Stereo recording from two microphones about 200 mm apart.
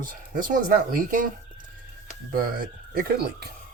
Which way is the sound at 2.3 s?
45° right (ahead or behind).